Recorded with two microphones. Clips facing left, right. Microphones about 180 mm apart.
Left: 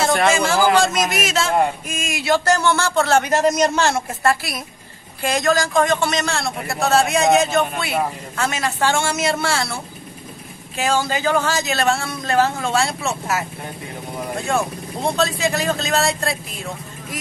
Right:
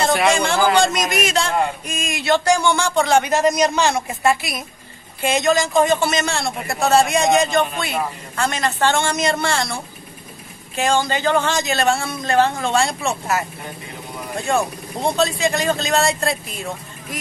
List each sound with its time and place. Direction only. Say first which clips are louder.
0.0 s speech: even; centre (ahead or behind)
2.4 s a woman's voice: right 1 dB; 15° right (ahead or behind)
5.9 s a woman's voice: right 1 dB; 5° right (ahead or behind)
10.8 s speech: right 1 dB; 5° left (ahead or behind)